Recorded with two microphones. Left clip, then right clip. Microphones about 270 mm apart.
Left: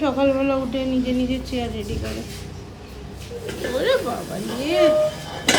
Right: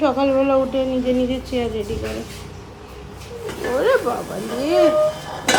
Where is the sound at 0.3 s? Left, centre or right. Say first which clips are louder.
Right 4 dB; centre.